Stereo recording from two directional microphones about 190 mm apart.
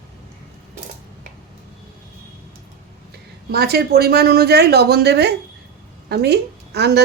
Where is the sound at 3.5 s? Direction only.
55° right (ahead or behind).